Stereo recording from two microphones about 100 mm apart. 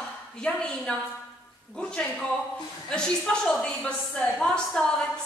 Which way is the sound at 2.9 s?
5° left (ahead or behind).